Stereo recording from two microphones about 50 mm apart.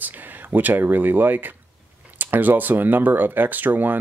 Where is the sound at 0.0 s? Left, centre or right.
Right.